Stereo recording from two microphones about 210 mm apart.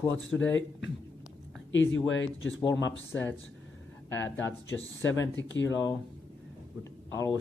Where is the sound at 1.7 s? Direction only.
65° left (ahead or behind).